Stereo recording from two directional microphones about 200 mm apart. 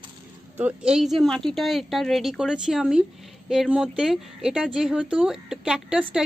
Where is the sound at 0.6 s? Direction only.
5° right (ahead or behind).